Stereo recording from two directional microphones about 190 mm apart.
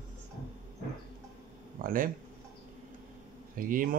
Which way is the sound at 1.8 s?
45° right (ahead or behind).